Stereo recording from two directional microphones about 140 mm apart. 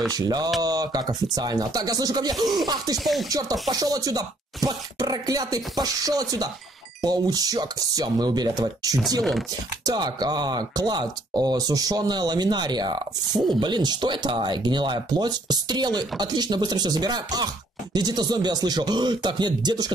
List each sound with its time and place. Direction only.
0.1 s speech: 25° right (ahead or behind)
2.3 s a sound: centre (ahead or behind)
3.3 s speech: 25° right (ahead or behind)